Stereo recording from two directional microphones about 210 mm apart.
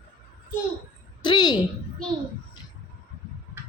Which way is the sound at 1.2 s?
20° left (ahead or behind).